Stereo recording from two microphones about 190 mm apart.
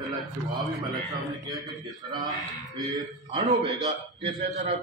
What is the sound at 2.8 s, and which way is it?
Speech, 20° right (ahead or behind).